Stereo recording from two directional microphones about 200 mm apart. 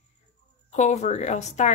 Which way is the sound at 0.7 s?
35° left (ahead or behind).